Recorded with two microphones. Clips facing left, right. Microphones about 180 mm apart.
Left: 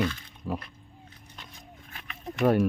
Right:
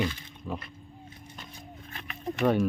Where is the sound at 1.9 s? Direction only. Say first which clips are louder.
Right 5 dB; 5° left (ahead or behind).